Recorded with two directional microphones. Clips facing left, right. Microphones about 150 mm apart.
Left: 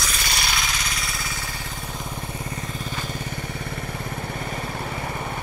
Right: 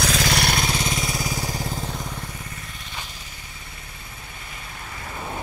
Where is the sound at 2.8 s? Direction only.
50° left (ahead or behind).